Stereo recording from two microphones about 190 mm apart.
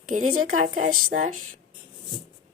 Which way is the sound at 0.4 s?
45° right (ahead or behind).